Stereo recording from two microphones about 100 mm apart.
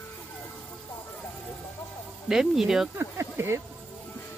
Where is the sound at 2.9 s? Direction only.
25° right (ahead or behind).